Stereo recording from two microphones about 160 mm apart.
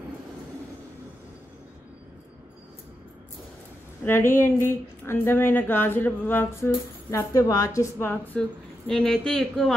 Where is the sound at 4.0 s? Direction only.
15° left (ahead or behind).